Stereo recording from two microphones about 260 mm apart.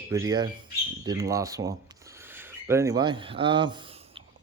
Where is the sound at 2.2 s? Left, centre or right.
Centre.